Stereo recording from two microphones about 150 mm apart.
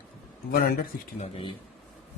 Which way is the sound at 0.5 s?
90° left.